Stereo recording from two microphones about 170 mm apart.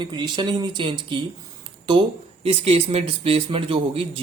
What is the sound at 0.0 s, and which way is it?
A man's voice, 25° right (ahead or behind).